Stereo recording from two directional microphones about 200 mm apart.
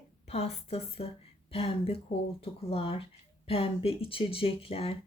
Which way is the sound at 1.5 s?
30° left (ahead or behind).